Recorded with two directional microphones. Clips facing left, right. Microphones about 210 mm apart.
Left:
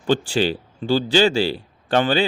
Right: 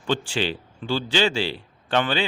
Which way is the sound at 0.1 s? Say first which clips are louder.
Left 6 dB; 40° left (ahead or behind).